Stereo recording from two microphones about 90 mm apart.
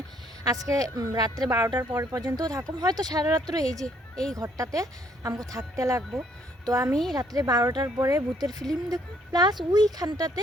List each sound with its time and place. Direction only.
0.4 s speech: 40° right (ahead or behind)
1.5 s a woman's voice: 30° right (ahead or behind)
2.1 s speech: 45° right (ahead or behind)
3.8 s speech: 5° left (ahead or behind)
4.4 s a woman's voice: 40° right (ahead or behind)